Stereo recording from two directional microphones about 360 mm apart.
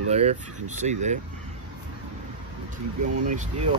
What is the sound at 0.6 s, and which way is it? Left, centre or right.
Speech, centre.